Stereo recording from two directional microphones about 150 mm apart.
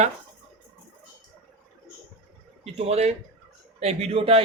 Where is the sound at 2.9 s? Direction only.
45° right (ahead or behind).